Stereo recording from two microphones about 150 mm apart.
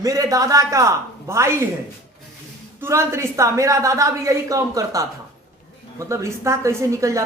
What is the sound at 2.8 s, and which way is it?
A woman's voice, 15° right (ahead or behind).